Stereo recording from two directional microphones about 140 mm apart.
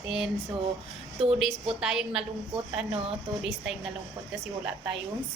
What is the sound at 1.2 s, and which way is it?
Speech, 40° right (ahead or behind).